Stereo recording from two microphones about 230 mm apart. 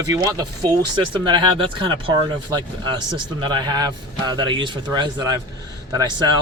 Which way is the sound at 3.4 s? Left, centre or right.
Centre.